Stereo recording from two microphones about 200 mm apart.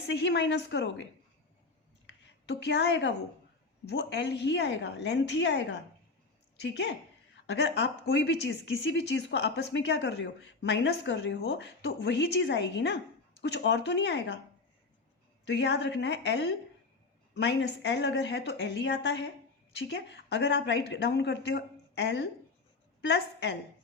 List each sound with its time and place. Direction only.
0.1 s speech: 60° left (ahead or behind)
2.0 s a sound: 60° left (ahead or behind)
3.8 s speech: 60° left (ahead or behind)
15.4 s a woman's voice: 60° left (ahead or behind)